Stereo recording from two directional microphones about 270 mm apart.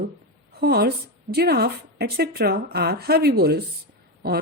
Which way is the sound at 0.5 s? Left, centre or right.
Right.